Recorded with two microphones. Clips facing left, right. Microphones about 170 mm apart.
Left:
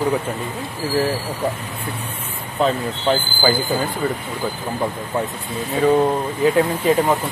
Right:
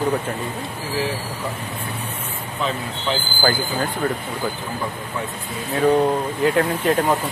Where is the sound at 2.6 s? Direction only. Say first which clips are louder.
Left 6 dB; 50° left (ahead or behind).